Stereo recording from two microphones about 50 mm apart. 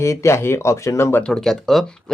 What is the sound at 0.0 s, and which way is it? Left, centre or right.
Speech, left.